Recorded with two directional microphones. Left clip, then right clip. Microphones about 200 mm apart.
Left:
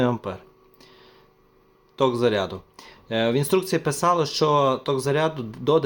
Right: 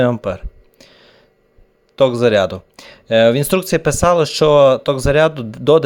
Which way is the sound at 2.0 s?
35° right (ahead or behind).